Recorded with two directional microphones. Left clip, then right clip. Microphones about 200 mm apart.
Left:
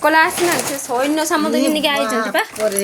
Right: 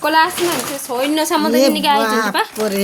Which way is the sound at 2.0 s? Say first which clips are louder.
Right 2 dB; 60° right (ahead or behind).